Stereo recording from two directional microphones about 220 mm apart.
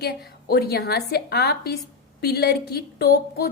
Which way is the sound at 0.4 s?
45° left (ahead or behind).